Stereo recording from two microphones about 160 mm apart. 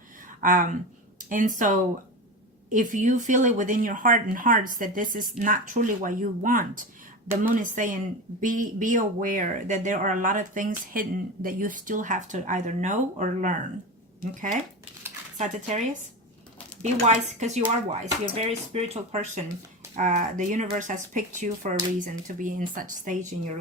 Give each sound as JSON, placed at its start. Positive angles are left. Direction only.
{"t": 0.3, "sound": "speech", "side_deg": -55}
{"t": 15.4, "sound": "speech", "side_deg": -50}
{"t": 16.8, "sound": "speech", "side_deg": -45}